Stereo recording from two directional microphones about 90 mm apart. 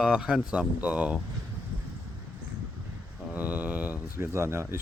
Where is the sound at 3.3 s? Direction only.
15° right (ahead or behind).